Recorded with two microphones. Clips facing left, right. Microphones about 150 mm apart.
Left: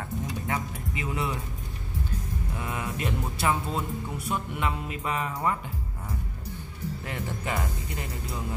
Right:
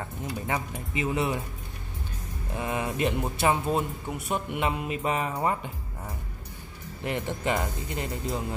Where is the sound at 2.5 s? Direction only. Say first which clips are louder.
Right 5 dB; 25° right (ahead or behind).